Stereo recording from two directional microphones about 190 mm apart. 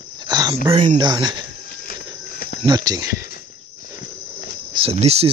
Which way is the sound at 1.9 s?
50° left (ahead or behind).